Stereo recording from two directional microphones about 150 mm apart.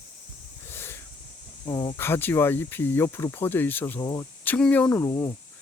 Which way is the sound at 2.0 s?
15° left (ahead or behind).